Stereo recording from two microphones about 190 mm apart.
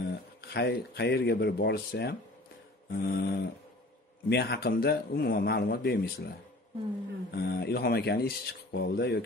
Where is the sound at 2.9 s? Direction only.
55° left (ahead or behind).